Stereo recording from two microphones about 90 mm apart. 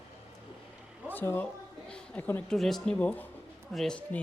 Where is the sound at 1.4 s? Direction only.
10° left (ahead or behind).